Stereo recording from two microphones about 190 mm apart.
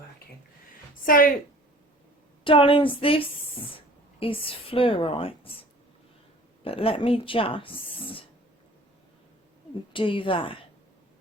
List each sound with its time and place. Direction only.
1.0 s a woman's voice: 45° left (ahead or behind)
2.4 s a woman's voice: 25° left (ahead or behind)
6.7 s a woman's voice: 30° left (ahead or behind)
9.9 s a woman's voice: 25° left (ahead or behind)